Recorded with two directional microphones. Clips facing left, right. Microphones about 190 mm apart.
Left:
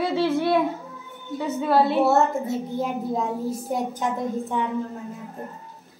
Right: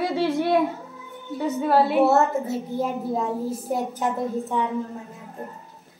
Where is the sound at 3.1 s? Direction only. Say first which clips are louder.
Even; 5° right (ahead or behind).